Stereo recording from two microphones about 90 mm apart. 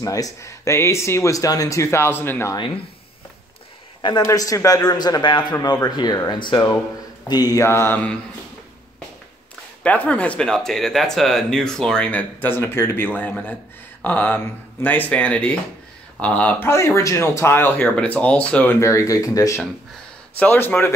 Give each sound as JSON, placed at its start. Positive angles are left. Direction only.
{"t": 0.0, "sound": "speech", "side_deg": 35}
{"t": 2.5, "sound": "speech", "side_deg": 70}
{"t": 4.3, "sound": "a man's voice", "side_deg": 40}
{"t": 7.6, "sound": "speech", "side_deg": 30}
{"t": 9.8, "sound": "speech", "side_deg": 15}
{"t": 18.7, "sound": "speech", "side_deg": 35}
{"t": 20.3, "sound": "speech", "side_deg": 20}